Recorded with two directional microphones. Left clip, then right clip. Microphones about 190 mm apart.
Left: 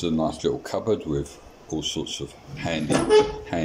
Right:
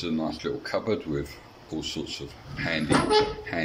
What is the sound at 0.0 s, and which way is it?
Speech, 20° left (ahead or behind).